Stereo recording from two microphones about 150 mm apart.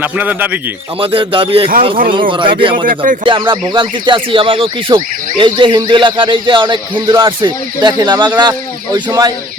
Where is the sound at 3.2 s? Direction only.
30° right (ahead or behind).